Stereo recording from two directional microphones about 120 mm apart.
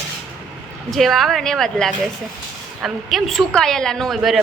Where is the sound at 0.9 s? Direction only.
Centre (ahead or behind).